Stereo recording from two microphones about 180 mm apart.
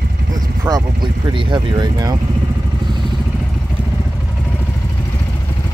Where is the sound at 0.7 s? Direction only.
25° right (ahead or behind).